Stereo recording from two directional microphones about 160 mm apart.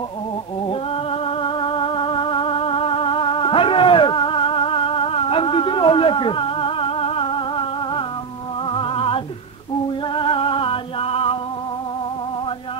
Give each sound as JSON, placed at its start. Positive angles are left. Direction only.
{"t": 0.7, "sound": "music", "side_deg": 35}